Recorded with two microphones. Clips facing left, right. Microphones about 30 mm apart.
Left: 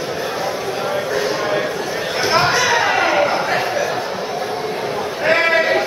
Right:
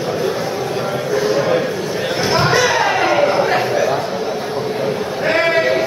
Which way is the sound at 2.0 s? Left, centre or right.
Centre.